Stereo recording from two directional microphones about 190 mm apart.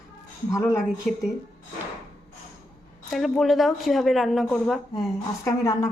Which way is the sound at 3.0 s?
Centre (ahead or behind).